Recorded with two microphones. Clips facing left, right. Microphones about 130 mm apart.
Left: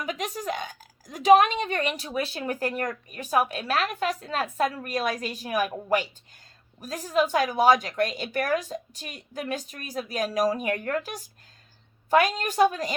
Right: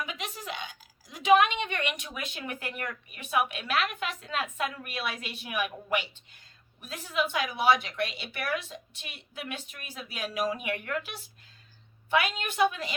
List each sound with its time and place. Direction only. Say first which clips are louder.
0.0 s a woman's voice: left 7 dB; 40° left (ahead or behind)